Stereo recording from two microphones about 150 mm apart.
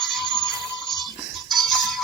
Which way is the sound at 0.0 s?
5° left (ahead or behind).